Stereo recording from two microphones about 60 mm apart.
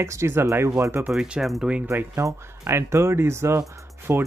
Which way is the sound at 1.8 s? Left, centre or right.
Right.